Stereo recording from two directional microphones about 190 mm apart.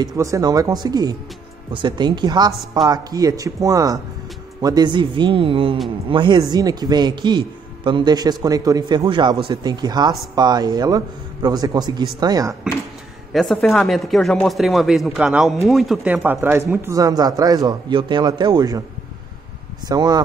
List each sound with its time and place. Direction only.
0.0 s a man's voice: 20° right (ahead or behind)
13.3 s speech: centre (ahead or behind); by 18.8 s 20° right (ahead or behind)
19.9 s a man's voice: 20° right (ahead or behind)